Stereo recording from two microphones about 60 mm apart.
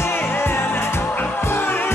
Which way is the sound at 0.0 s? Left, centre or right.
Left.